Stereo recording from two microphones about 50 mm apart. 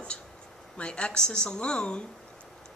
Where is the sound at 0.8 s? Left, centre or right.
Centre.